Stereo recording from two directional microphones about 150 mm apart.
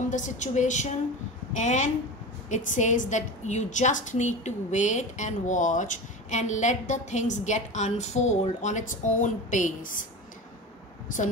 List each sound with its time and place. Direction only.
0.1 s a woman's voice: 55° left (ahead or behind)